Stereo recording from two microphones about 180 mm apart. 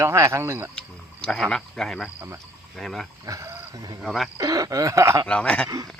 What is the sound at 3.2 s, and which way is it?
Speech, 15° right (ahead or behind).